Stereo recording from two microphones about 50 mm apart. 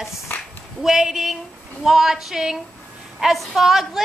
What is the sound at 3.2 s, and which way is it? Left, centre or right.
Female singing, centre.